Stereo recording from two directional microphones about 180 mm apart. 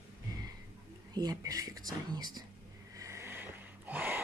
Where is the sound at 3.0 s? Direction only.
15° right (ahead or behind).